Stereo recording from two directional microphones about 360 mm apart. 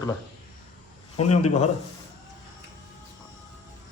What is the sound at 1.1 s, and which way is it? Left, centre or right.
Speech, centre.